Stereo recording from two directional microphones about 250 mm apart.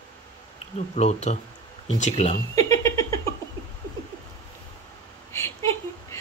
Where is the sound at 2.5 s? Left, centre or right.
Centre.